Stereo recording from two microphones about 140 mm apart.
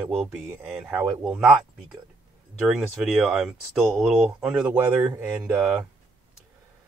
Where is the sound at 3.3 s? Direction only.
Centre (ahead or behind).